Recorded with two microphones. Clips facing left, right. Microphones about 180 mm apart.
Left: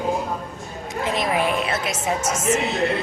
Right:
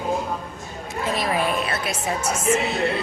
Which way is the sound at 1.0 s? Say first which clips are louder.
Left 1 dB; 20° left (ahead or behind).